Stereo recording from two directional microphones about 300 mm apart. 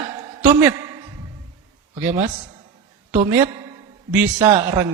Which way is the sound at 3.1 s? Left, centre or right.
Centre.